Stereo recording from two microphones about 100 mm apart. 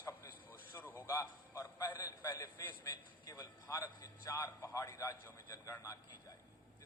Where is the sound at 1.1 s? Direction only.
30° left (ahead or behind).